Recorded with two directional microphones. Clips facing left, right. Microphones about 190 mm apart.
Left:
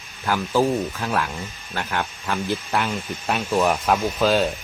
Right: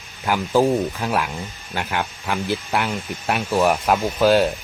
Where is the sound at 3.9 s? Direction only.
15° right (ahead or behind).